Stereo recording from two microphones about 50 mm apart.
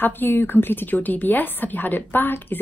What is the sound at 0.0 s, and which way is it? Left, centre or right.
Speech, left.